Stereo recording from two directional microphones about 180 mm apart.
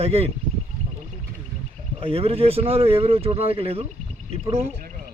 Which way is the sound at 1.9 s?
35° right (ahead or behind).